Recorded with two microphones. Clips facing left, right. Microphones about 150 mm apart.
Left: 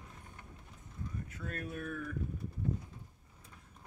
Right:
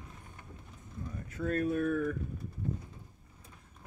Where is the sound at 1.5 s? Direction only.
40° right (ahead or behind).